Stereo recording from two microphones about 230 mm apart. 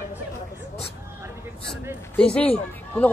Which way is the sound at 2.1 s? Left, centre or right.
Centre.